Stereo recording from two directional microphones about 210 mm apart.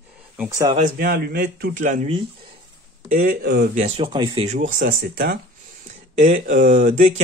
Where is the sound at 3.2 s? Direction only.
45° right (ahead or behind).